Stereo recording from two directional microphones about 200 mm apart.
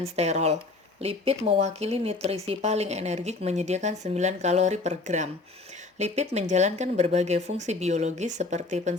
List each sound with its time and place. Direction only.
0.0 s speech: 35° right (ahead or behind)